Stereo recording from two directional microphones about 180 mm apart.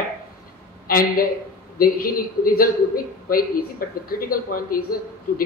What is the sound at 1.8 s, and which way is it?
Speech, 55° left (ahead or behind).